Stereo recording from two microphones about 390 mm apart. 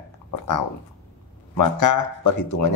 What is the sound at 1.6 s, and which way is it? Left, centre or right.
Speech, left.